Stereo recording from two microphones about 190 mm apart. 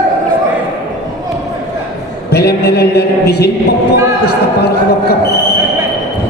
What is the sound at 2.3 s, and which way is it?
A man's voice, 55° left (ahead or behind).